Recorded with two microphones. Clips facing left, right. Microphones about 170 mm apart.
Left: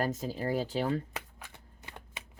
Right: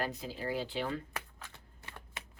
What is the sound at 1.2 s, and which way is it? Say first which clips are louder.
Shuffling cards: left 1 dB; 20° left (ahead or behind).